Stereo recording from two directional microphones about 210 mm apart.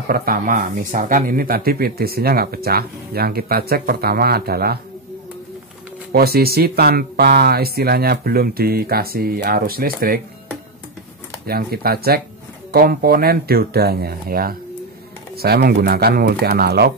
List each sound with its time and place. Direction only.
0.1 s speech: 45° right (ahead or behind)
6.1 s speech: 45° right (ahead or behind)
11.4 s speech: 45° right (ahead or behind)